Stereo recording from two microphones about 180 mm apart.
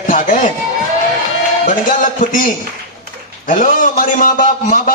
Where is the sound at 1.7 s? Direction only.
45° left (ahead or behind).